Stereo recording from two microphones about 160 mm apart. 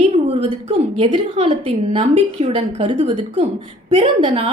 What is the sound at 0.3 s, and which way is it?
A woman's voice, 35° right (ahead or behind).